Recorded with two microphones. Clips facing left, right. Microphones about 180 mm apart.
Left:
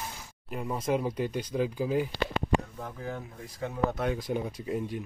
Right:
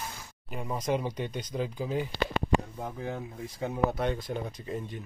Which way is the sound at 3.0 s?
25° right (ahead or behind).